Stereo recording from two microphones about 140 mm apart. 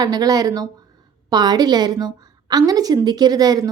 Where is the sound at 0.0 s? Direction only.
30° right (ahead or behind).